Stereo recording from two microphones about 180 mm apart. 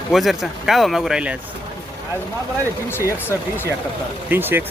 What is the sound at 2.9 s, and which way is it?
Speech, 10° left (ahead or behind).